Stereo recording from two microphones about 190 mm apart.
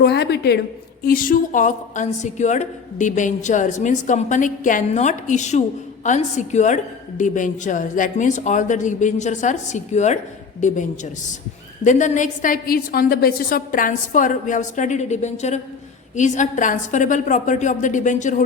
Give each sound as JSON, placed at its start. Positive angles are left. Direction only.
{"t": 0.0, "sound": "a woman's voice", "side_deg": 60}
{"t": 1.0, "sound": "a woman's voice", "side_deg": 45}